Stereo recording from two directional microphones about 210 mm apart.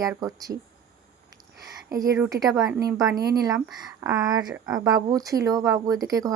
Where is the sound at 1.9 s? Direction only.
15° right (ahead or behind).